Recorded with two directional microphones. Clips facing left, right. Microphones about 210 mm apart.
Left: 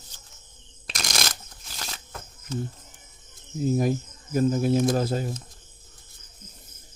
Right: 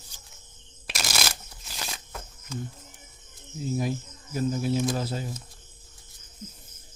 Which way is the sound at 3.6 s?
50° left (ahead or behind).